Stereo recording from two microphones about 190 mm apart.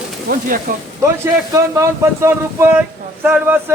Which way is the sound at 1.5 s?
15° right (ahead or behind).